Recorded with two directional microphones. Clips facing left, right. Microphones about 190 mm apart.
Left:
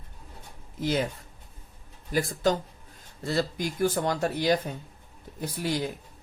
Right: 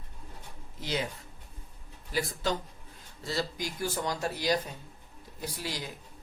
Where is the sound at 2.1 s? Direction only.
45° left (ahead or behind).